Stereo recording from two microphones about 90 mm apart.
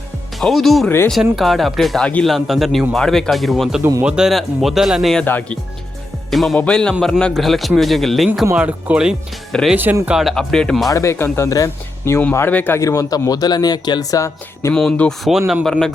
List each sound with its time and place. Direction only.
0.3 s speech: centre (ahead or behind)
5.2 s speech: 20° left (ahead or behind)
6.3 s speech: centre (ahead or behind)
8.5 s speech: 15° right (ahead or behind)
10.2 s speech: centre (ahead or behind)
10.8 s speech: 35° left (ahead or behind)
12.3 s speech: 20° left (ahead or behind)
12.8 s speech: 40° left (ahead or behind)
14.7 s speech: 10° left (ahead or behind)
15.2 s speech: 5° right (ahead or behind)